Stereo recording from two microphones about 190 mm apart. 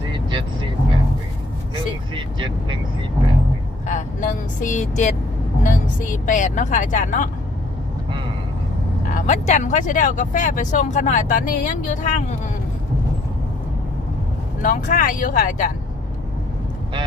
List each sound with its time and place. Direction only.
0.1 s vehicle: 25° right (ahead or behind)
1.7 s vehicle: 25° right (ahead or behind)
3.8 s speech: 40° left (ahead or behind)
9.1 s speech: 40° left (ahead or behind)
14.6 s speech: 45° left (ahead or behind)